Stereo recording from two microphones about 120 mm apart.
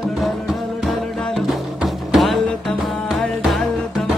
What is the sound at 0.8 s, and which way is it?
Music, centre (ahead or behind).